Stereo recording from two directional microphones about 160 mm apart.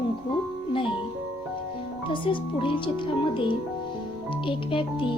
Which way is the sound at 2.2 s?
30° left (ahead or behind).